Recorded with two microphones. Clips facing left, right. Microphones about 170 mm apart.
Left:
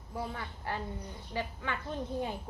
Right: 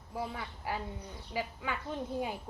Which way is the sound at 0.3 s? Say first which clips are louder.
Even; 10° right (ahead or behind).